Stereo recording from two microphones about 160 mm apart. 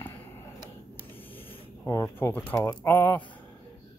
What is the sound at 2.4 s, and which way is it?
Speech, 5° left (ahead or behind).